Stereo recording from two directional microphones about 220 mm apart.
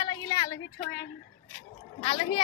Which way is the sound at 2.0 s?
25° left (ahead or behind).